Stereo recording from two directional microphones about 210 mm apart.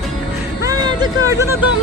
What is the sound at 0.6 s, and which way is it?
Music, 15° right (ahead or behind).